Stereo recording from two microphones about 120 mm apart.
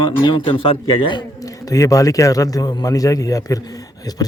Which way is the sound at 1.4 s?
30° left (ahead or behind).